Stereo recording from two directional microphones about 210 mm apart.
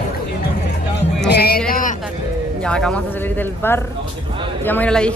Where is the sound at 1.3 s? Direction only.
50° left (ahead or behind).